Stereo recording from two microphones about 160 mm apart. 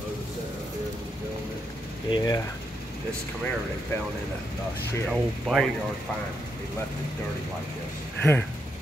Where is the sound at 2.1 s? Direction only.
25° left (ahead or behind).